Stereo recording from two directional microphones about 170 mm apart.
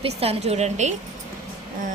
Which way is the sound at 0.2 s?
35° right (ahead or behind).